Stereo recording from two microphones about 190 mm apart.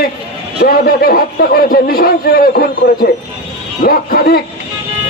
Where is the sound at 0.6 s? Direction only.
50° left (ahead or behind).